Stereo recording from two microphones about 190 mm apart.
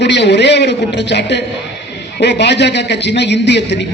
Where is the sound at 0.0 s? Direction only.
65° left (ahead or behind).